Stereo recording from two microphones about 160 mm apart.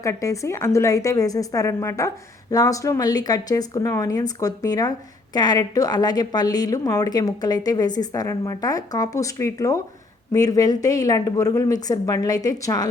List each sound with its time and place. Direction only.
0.0 s a woman's voice: 20° left (ahead or behind)